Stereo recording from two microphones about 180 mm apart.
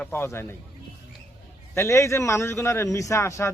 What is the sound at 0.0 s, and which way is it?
Speech, 10° left (ahead or behind).